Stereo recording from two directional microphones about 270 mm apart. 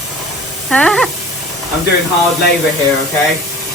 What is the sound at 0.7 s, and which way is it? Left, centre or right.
Speech, centre.